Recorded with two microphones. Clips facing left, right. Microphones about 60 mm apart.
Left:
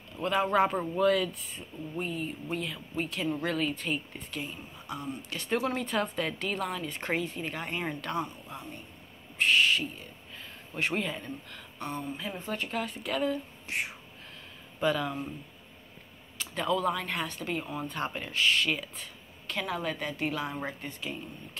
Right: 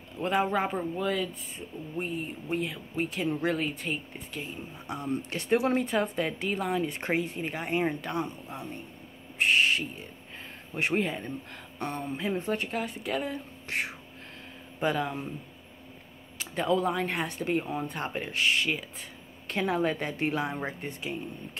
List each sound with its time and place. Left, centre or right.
0.2 s speech: right
0.5 s a woman's voice: centre
2.0 s speech: right
4.8 s a woman's voice: right
6.8 s speech: right
9.4 s speech: right
11.8 s a sound: right
12.2 s speech: right
12.7 s speech: centre
13.7 s whispering: right
14.8 s speech: right
16.3 s speech: right
19.4 s speech: right